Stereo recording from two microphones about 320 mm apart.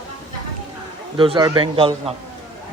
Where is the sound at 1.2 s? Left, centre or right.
Centre.